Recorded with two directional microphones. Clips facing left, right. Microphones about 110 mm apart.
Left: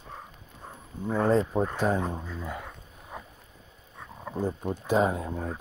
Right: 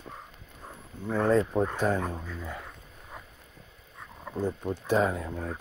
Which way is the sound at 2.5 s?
30° left (ahead or behind).